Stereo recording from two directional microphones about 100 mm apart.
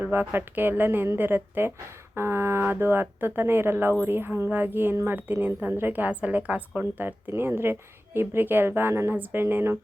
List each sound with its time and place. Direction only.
0.0 s a woman's voice: 20° right (ahead or behind)